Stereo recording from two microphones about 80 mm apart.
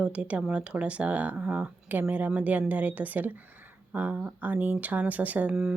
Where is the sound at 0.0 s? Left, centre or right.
Centre.